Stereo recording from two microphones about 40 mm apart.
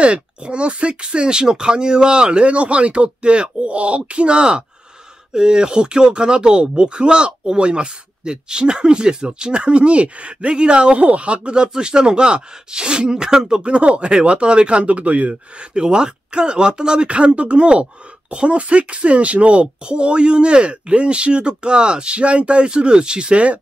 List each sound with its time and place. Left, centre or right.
0.0 s speech: right
11.1 s speech: right; by 13.7 s centre
13.7 s speech: right
15.7 s speech: right